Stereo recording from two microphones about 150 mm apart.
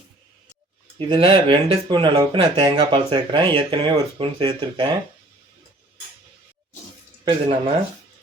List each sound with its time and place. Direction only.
0.9 s speech: 40° right (ahead or behind)
7.3 s speech: 35° right (ahead or behind)